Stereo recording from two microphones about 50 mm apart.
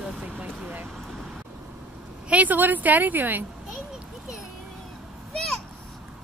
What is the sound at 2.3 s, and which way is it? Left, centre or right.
A woman's voice, right.